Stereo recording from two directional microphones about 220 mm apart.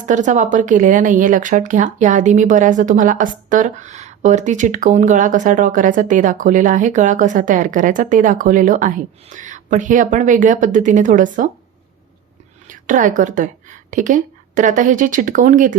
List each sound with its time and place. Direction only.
0.0 s speech: 35° right (ahead or behind)
12.6 s a woman's voice: 35° right (ahead or behind)